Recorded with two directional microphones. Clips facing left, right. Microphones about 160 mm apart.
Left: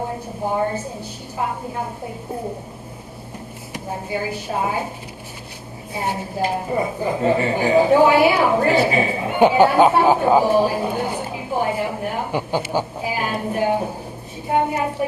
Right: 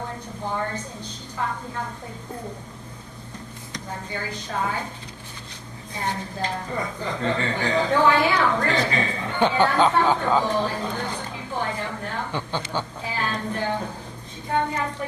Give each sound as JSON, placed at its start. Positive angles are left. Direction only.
{"t": 0.5, "sound": "a woman's voice", "side_deg": 20}
{"t": 4.1, "sound": "a woman's voice", "side_deg": 15}
{"t": 5.9, "sound": "a woman's voice", "side_deg": 10}
{"t": 6.6, "sound": "speech", "side_deg": 25}
{"t": 7.0, "sound": "a woman's voice", "side_deg": 15}